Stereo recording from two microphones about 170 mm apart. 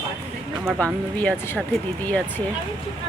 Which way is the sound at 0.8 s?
10° left (ahead or behind).